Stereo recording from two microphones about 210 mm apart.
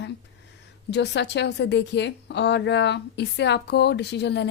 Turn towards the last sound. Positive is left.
turn(degrees=55)  # may be behind; listen again after turning